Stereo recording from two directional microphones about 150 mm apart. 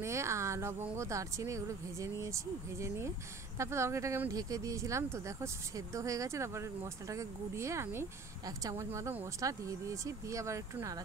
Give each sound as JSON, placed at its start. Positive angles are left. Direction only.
{"t": 0.0, "sound": "speech", "side_deg": -20}